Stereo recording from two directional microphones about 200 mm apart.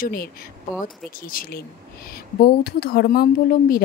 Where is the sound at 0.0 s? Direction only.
45° left (ahead or behind).